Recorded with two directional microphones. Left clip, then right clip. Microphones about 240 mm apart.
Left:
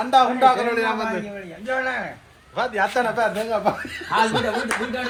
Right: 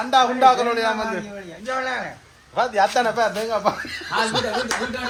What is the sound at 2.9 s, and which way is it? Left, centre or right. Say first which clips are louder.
Speech: right 1 dB; right.